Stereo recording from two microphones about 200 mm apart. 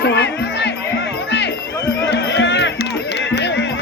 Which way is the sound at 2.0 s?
60° left (ahead or behind).